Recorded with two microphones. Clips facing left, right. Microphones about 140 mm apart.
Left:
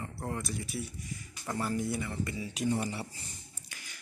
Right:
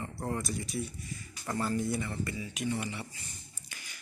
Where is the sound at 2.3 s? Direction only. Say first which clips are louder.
Left 6 dB; 35° left (ahead or behind).